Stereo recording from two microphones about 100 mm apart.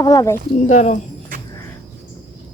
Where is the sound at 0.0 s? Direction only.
35° left (ahead or behind).